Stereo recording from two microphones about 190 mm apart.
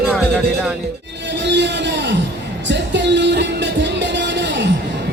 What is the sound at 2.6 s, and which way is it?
Music, 70° right (ahead or behind).